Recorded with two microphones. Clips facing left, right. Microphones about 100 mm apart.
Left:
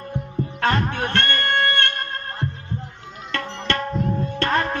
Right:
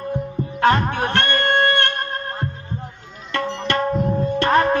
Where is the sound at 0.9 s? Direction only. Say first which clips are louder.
Right 3 dB; 20° right (ahead or behind).